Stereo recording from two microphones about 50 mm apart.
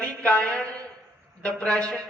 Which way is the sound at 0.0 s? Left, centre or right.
Left.